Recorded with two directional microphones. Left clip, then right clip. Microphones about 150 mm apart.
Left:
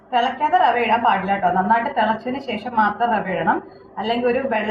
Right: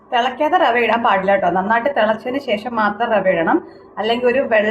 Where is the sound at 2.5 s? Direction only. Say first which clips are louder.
Right 1 dB; 90° right.